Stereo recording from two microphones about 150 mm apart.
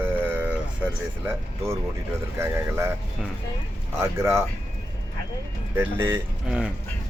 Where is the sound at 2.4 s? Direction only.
15° right (ahead or behind).